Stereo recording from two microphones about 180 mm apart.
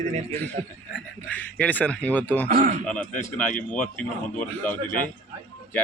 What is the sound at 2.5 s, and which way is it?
Speech, 45° right (ahead or behind).